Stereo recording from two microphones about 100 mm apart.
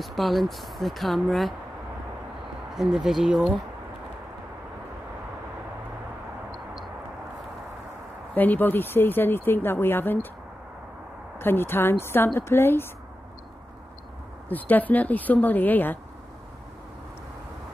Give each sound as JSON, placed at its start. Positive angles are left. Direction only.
{"t": 0.0, "sound": "speech", "side_deg": 0}
{"t": 2.7, "sound": "speech", "side_deg": -5}
{"t": 8.4, "sound": "speech", "side_deg": 20}
{"t": 11.3, "sound": "speech", "side_deg": 20}
{"t": 14.5, "sound": "speech", "side_deg": 15}